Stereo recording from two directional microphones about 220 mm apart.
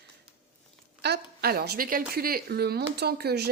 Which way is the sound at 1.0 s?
50° right (ahead or behind).